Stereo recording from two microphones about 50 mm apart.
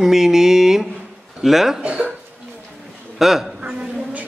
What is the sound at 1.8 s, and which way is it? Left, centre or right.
Speech, right.